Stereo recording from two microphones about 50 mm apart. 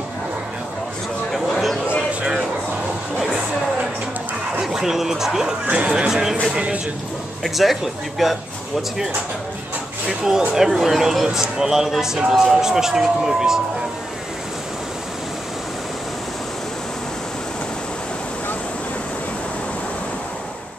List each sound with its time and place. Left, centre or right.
1.3 s a sound: centre
4.6 s speech: centre
7.4 s speech: centre
10.0 s speech: centre